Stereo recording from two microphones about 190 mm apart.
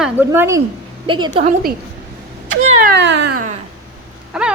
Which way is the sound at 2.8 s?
65° right (ahead or behind).